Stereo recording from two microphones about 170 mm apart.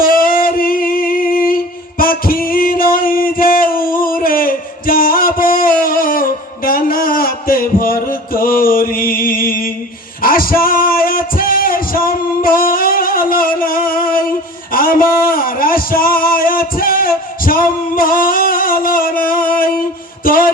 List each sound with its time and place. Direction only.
0.0 s singing: 60° left (ahead or behind)
2.0 s music: 60° left (ahead or behind)